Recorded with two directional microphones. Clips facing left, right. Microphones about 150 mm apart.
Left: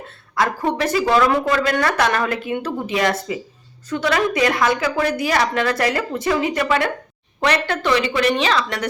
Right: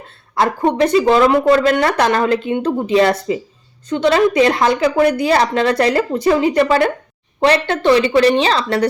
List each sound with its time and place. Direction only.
0.3 s speech: 30° right (ahead or behind)